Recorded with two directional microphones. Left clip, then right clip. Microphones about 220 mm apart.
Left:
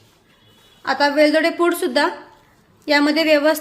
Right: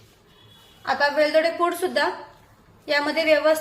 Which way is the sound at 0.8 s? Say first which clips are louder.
Left 5 dB; 50° left (ahead or behind).